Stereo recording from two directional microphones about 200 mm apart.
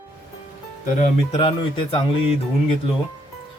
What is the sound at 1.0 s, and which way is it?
Speech, 30° left (ahead or behind).